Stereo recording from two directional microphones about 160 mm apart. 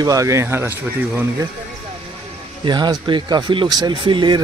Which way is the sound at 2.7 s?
25° right (ahead or behind).